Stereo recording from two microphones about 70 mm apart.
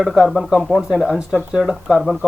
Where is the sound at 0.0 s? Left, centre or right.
Centre.